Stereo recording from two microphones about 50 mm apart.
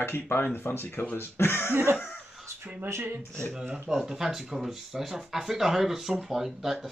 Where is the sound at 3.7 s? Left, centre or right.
Centre.